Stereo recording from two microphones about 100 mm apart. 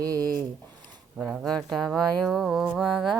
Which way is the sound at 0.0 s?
40° right (ahead or behind).